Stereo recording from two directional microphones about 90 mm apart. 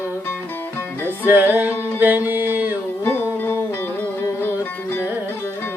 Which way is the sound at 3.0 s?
25° left (ahead or behind).